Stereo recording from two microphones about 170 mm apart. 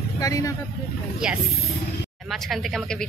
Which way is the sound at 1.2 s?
5° right (ahead or behind).